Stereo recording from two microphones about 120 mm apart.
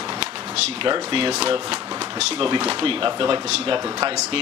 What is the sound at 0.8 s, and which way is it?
Speech, 45° right (ahead or behind).